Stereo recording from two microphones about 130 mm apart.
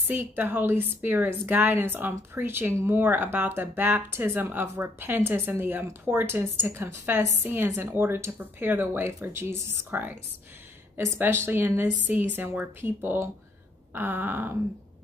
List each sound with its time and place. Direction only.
0.0 s speech: 15° right (ahead or behind)